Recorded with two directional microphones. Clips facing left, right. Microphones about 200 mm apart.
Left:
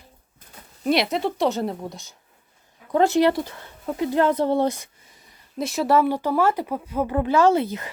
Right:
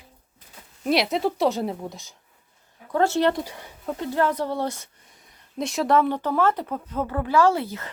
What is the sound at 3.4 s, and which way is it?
Speech, 15° right (ahead or behind).